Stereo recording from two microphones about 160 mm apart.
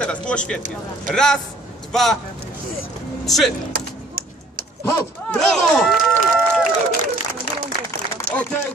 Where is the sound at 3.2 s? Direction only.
Centre (ahead or behind).